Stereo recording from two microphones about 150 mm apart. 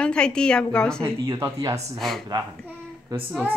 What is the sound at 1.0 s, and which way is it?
Speech, 20° right (ahead or behind).